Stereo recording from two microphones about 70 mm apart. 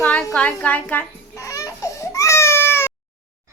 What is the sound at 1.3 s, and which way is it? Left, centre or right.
Baby cry, left.